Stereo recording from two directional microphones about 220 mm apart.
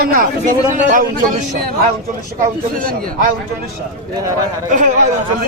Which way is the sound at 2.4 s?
40° right (ahead or behind).